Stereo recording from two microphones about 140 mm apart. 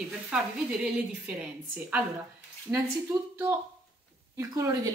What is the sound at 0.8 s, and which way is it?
A woman's voice, 10° right (ahead or behind).